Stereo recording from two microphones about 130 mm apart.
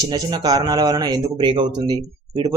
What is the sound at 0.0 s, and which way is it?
Speech, 30° right (ahead or behind).